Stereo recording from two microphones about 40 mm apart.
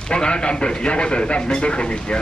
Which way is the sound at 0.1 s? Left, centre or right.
Left.